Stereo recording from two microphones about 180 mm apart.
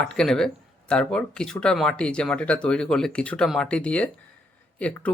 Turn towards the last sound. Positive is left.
turn(degrees=5)  # may be behind; listen again after turning